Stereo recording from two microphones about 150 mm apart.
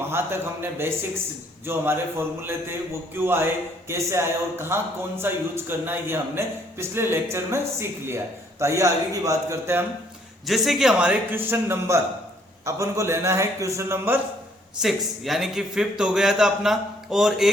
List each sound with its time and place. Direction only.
0.1 s a man's voice: 15° right (ahead or behind)
10.4 s a man's voice: centre (ahead or behind)
14.8 s a man's voice: centre (ahead or behind)